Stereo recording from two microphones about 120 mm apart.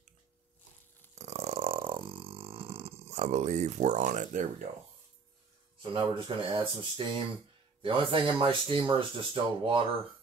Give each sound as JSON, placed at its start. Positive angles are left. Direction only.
{"t": 1.1, "sound": "burping", "side_deg": -70}
{"t": 5.8, "sound": "speech", "side_deg": -45}